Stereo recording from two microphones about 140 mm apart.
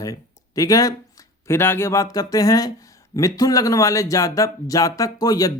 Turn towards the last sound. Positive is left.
turn(degrees=25)  # may be behind; listen again after turning